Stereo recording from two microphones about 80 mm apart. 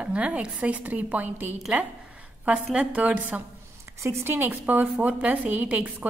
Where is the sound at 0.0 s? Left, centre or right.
Centre.